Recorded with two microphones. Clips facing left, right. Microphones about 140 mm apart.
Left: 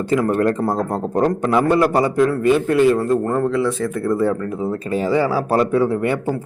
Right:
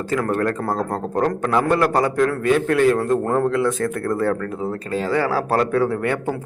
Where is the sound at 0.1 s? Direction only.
20° left (ahead or behind); by 3.7 s centre (ahead or behind).